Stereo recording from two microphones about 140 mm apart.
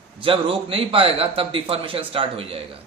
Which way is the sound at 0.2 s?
40° right (ahead or behind).